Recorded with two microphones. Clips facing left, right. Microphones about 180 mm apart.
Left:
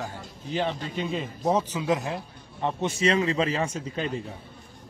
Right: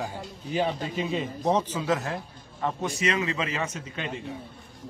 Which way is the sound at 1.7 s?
15° left (ahead or behind).